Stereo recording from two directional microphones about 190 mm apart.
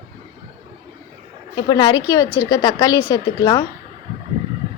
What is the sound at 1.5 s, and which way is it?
A woman's voice, 20° left (ahead or behind).